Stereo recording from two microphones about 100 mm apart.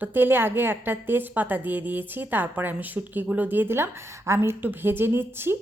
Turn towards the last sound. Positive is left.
turn(degrees=-20)  # may be behind; listen again after turning